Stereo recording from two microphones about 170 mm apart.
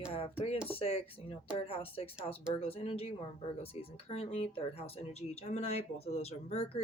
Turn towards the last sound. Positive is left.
turn(degrees=35)  # may be behind; listen again after turning